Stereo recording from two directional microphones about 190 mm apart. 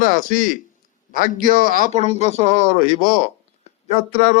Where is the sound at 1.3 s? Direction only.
45° right (ahead or behind).